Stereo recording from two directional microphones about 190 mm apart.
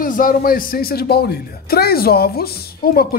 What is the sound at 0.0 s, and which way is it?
Speech, 45° left (ahead or behind).